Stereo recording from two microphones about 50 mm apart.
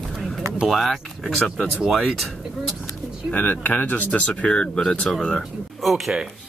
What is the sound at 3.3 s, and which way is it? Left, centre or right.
Speech, left.